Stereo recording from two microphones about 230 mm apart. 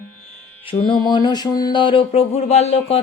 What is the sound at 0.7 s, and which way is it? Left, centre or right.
Speech, centre.